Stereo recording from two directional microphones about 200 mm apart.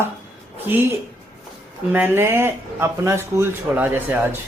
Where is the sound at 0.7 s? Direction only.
10° right (ahead or behind).